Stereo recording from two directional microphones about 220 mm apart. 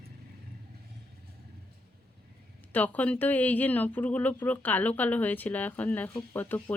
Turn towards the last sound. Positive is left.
turn(degrees=10)  # may be behind; listen again after turning